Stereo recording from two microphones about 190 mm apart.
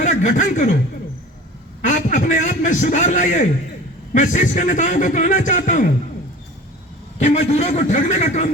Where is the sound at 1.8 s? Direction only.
40° left (ahead or behind).